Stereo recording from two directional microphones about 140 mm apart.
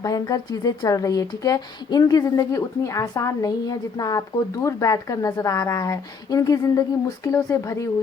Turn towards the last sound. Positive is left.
turn(degrees=25)  # may be behind; listen again after turning